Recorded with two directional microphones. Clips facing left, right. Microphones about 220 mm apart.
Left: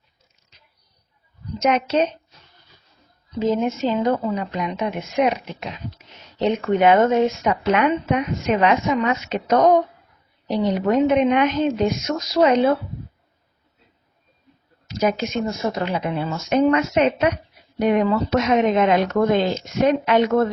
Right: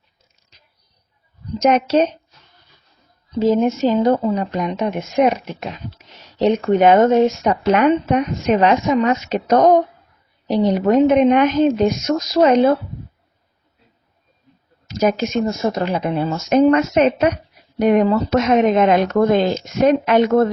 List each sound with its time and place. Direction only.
1.6 s a woman's voice: 40° right (ahead or behind)
3.3 s a woman's voice: 40° right (ahead or behind)
14.8 s a woman's voice: 45° right (ahead or behind)